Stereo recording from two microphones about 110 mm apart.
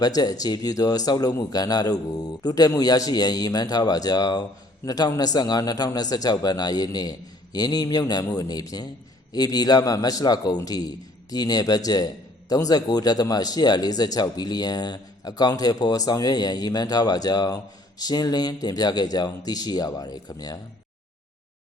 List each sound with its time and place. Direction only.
0.0 s speech: 35° left (ahead or behind)